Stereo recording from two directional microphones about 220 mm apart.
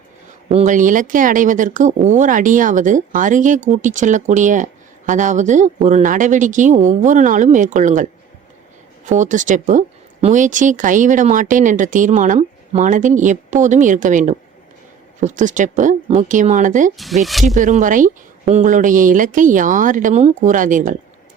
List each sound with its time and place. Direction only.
0.4 s speech: 30° right (ahead or behind)
9.0 s speech: 35° right (ahead or behind)